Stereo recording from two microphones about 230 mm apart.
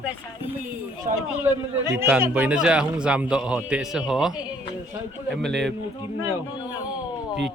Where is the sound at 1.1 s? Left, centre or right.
Right.